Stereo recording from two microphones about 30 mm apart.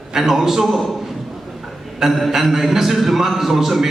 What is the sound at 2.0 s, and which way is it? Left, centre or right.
A man's voice, centre.